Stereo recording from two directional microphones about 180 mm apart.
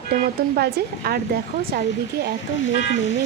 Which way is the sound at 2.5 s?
85° left.